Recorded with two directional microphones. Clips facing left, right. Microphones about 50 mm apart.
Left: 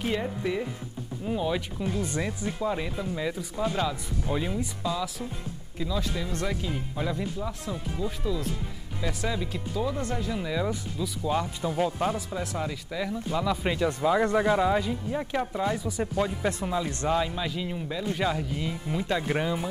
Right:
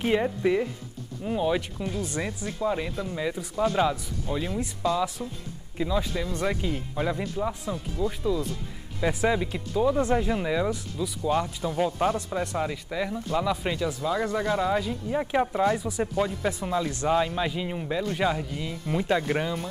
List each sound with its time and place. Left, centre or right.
0.0 s speech: centre
3.8 s speech: centre
4.3 s speech: centre
5.2 s speech: left
5.8 s speech: centre
7.6 s speech: centre
9.3 s speech: right
11.0 s speech: centre
12.3 s speech: centre
15.0 s speech: centre
18.1 s speech: centre
18.5 s speech: centre
18.9 s speech: centre
19.2 s speech: centre